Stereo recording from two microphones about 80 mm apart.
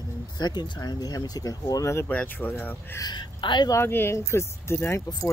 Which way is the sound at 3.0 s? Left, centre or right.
Left.